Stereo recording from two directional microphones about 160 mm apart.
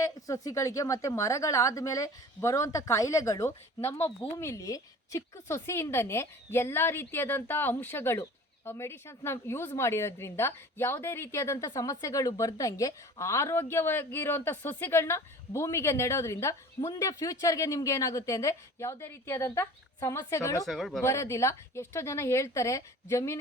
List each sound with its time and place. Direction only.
0.0 s a woman's voice: 20° left (ahead or behind)
20.7 s speech: centre (ahead or behind)
21.0 s a woman's voice: 20° left (ahead or behind)